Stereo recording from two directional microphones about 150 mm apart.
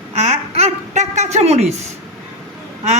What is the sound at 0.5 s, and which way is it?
A woman's voice, 50° right (ahead or behind).